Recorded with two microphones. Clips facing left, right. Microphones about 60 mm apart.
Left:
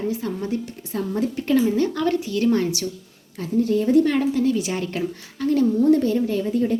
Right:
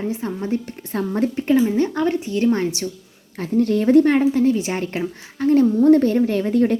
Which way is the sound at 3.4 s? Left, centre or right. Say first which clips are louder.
Right 2 dB; right.